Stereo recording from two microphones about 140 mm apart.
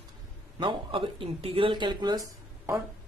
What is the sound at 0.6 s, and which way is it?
Speech, 35° right (ahead or behind).